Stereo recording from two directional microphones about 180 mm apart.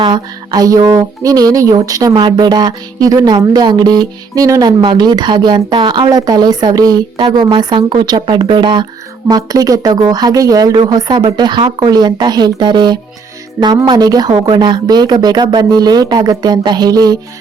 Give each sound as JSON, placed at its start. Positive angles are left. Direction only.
{"t": 0.0, "sound": "speech", "side_deg": -25}